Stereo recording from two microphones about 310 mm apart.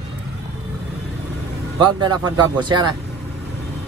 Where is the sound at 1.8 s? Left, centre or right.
Centre.